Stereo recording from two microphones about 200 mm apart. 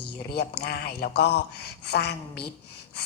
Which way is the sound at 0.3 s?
55° left (ahead or behind).